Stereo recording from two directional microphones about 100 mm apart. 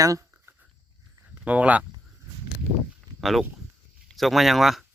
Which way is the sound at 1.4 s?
15° right (ahead or behind).